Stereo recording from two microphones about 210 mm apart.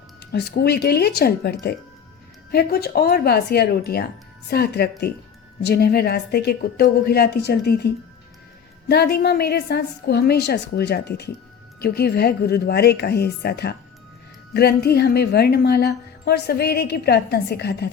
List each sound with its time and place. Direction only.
0.2 s a woman's voice: 50° left (ahead or behind)